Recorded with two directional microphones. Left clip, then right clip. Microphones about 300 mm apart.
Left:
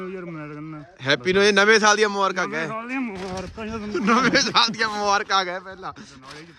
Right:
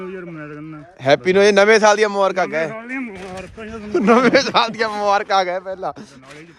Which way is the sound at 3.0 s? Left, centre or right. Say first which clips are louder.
Even; left.